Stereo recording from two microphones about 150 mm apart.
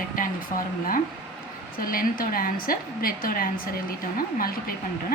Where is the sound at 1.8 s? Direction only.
75° left (ahead or behind).